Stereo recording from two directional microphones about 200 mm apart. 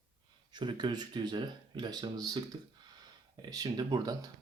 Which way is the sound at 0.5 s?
20° right (ahead or behind).